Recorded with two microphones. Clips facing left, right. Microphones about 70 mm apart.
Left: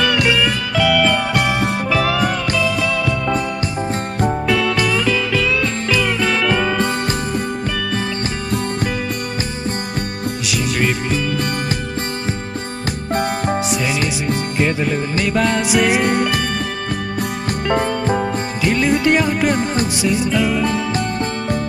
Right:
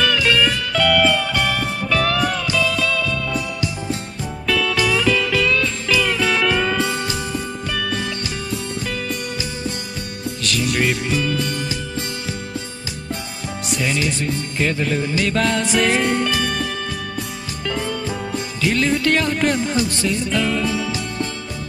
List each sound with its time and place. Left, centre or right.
0.0 s music: centre
4.5 s music: centre
4.7 s music: centre
10.4 s music: centre
13.7 s music: centre
17.6 s music: left
18.6 s music: centre
20.6 s music: left